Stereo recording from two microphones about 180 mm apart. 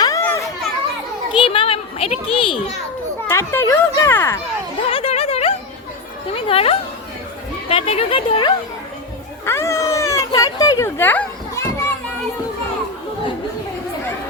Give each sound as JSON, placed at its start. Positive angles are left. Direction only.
{"t": 0.0, "sound": "children playing", "side_deg": 15}
{"t": 1.4, "sound": "a child's voice", "side_deg": 30}
{"t": 3.2, "sound": "speech", "side_deg": 15}
{"t": 4.9, "sound": "a sound", "side_deg": 30}
{"t": 6.5, "sound": "speech", "side_deg": 35}
{"t": 9.5, "sound": "a sound", "side_deg": 15}